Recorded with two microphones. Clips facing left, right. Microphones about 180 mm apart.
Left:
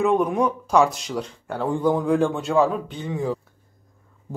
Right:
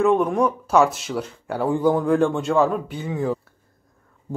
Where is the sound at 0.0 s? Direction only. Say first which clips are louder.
Right 2 dB; centre (ahead or behind).